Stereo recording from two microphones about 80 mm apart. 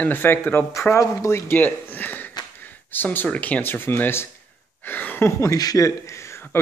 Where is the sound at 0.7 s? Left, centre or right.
Left.